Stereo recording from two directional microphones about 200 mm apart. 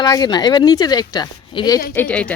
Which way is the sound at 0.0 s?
20° left (ahead or behind).